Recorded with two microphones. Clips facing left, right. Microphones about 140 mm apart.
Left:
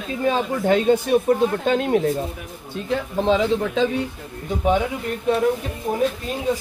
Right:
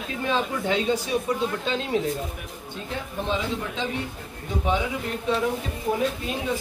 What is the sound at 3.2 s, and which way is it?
Speech, 90° left.